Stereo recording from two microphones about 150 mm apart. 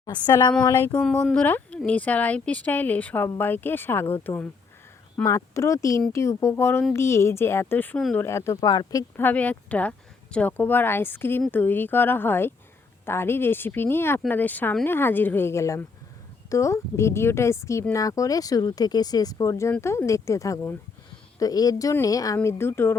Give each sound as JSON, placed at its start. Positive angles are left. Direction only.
{"t": 0.0, "sound": "speech", "side_deg": 25}
{"t": 0.9, "sound": "speech", "side_deg": 10}